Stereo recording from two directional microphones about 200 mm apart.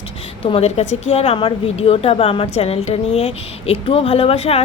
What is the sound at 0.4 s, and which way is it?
A woman's voice, 30° left (ahead or behind).